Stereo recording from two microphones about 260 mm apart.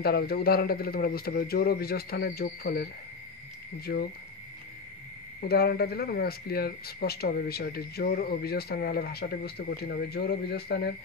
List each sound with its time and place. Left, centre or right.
0.0 s speech: left
5.5 s speech: left